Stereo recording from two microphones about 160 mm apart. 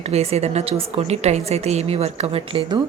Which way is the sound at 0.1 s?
40° right (ahead or behind).